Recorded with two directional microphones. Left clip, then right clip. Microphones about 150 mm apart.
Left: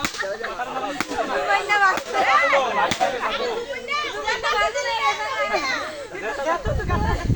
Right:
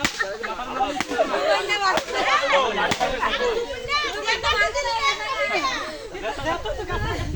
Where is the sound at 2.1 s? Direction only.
35° right (ahead or behind).